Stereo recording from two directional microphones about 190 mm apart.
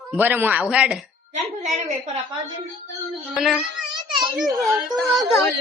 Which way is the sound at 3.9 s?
25° right (ahead or behind).